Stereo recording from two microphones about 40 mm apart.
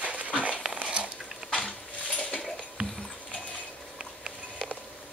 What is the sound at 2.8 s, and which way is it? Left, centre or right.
Music, right.